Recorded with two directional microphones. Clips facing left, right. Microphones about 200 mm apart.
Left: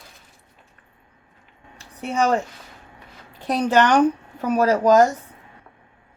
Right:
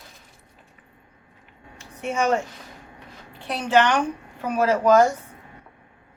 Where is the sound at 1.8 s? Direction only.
35° left (ahead or behind).